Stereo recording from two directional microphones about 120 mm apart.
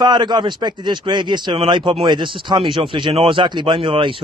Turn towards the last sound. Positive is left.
turn(degrees=-45)  # may be behind; listen again after turning